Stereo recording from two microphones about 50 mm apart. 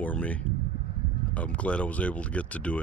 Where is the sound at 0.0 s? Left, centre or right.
Left.